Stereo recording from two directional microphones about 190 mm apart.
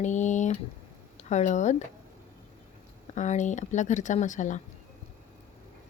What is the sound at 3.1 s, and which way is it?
Speech, 40° left (ahead or behind).